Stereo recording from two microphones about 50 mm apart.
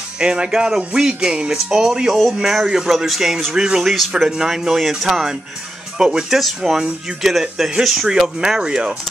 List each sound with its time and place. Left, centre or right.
0.2 s speech: centre
6.4 s speech: centre